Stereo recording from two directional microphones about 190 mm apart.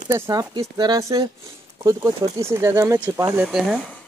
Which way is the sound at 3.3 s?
Centre (ahead or behind).